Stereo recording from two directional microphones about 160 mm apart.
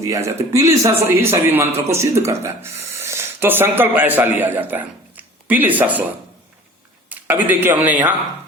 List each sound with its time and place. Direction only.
0.0 s speech: 20° right (ahead or behind)
7.1 s speech: 10° right (ahead or behind)